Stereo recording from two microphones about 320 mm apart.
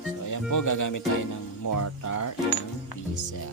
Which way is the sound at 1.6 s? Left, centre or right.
Left.